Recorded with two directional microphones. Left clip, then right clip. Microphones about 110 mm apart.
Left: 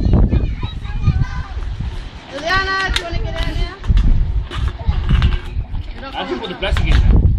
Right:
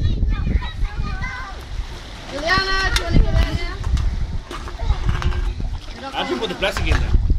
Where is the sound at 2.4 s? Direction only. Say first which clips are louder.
Left 2 dB; 50° right (ahead or behind).